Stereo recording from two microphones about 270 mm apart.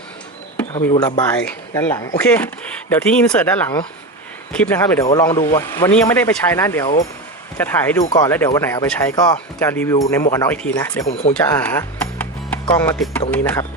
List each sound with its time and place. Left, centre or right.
0.7 s speech: centre
11.1 s speech: left
11.3 s speech: centre
12.2 s music: centre
13.3 s speech: centre